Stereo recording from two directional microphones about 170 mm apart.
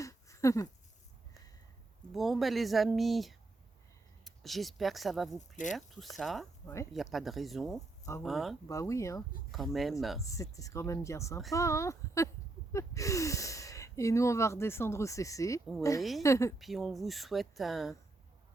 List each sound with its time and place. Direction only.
0.0 s a sound: 20° left (ahead or behind)
2.1 s speech: centre (ahead or behind)
8.6 s speech: 20° left (ahead or behind)
9.5 s speech: centre (ahead or behind)
10.2 s speech: 20° left (ahead or behind)
16.0 s speech: centre (ahead or behind)
16.2 s speech: 15° left (ahead or behind)
16.6 s speech: centre (ahead or behind)